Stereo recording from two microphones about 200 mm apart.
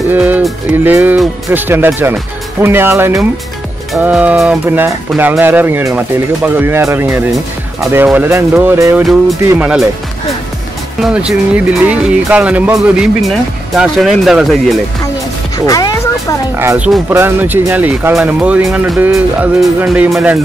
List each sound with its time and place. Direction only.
0.1 s speech: 5° right (ahead or behind)
11.0 s speech: 5° right (ahead or behind)
15.5 s music: 20° left (ahead or behind)
16.5 s speech: 10° right (ahead or behind)